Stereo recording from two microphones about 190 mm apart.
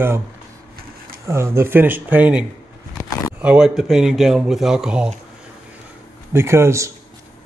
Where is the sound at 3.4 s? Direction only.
5° right (ahead or behind).